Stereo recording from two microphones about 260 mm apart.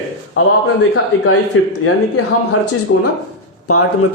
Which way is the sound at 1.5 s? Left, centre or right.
Left.